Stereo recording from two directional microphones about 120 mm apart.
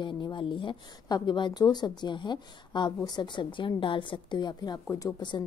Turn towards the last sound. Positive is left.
turn(degrees=30)  # may be behind; listen again after turning